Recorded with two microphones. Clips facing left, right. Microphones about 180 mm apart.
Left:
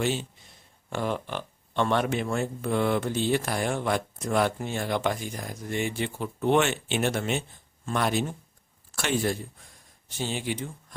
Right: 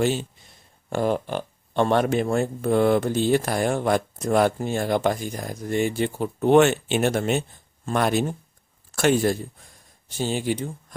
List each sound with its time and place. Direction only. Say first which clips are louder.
0.0 s speech: right 5 dB; 40° right (ahead or behind)